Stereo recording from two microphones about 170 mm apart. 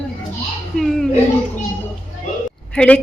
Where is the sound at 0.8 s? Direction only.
Centre (ahead or behind).